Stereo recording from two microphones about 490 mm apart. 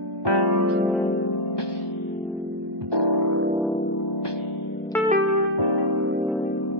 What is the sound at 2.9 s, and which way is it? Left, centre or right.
Music, right.